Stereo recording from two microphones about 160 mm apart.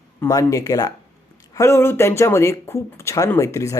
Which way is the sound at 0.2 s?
20° left (ahead or behind).